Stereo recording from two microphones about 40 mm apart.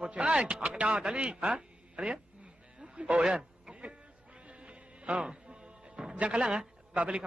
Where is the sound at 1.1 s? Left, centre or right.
Right.